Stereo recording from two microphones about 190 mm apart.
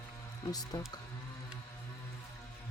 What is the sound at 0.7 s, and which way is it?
Speech, 20° left (ahead or behind).